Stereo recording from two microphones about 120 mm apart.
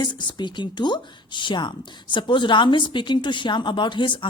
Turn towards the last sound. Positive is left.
turn(degrees=40)  # may be behind; listen again after turning